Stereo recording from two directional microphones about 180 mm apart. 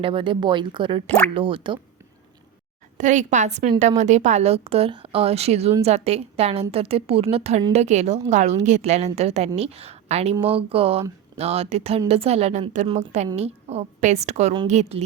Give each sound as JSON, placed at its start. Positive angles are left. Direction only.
{"t": 0.0, "sound": "speech", "side_deg": -30}
{"t": 1.0, "sound": "speech", "side_deg": 5}
{"t": 1.3, "sound": "speech", "side_deg": -30}
{"t": 3.0, "sound": "a woman's voice", "side_deg": -45}